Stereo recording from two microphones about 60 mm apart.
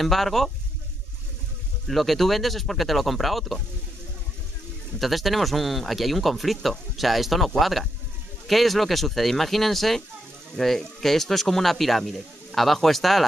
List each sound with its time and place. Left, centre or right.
0.0 s speech: centre
1.9 s speech: centre
4.9 s speech: centre